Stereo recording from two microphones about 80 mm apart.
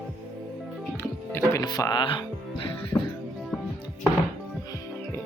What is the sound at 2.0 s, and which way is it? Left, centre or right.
Music, left.